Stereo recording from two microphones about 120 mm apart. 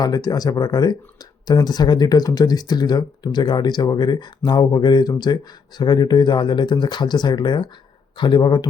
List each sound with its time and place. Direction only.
0.0 s speech: 30° left (ahead or behind)